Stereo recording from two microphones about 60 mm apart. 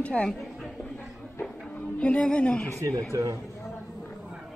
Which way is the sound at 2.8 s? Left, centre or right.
Right.